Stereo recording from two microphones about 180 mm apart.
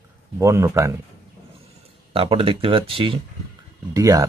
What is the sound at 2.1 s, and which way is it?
Speech, 30° right (ahead or behind).